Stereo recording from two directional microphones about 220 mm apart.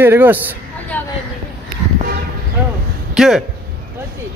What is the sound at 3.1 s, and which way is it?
Speech, centre (ahead or behind).